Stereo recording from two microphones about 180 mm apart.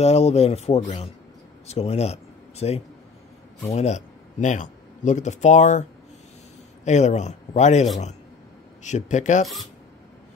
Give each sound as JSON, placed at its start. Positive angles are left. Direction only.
{"t": 0.0, "sound": "speech", "side_deg": 35}